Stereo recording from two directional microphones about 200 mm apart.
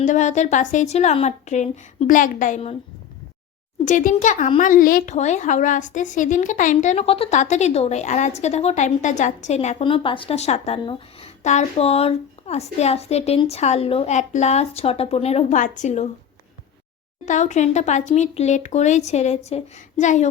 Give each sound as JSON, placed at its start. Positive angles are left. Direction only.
{"t": 0.0, "sound": "speech", "side_deg": 35}
{"t": 3.8, "sound": "speech", "side_deg": 40}
{"t": 17.2, "sound": "speech", "side_deg": 35}